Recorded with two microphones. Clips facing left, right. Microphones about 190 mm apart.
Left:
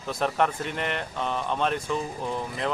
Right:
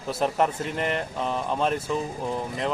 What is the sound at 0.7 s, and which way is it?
Speech, 35° right (ahead or behind).